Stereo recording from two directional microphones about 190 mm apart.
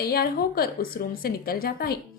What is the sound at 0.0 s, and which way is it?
A woman's voice, 55° left (ahead or behind).